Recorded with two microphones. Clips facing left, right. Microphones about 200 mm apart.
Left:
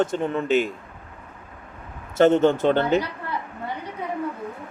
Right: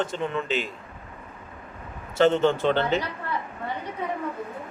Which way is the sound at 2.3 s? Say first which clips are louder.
Left 3 dB; 50° left (ahead or behind).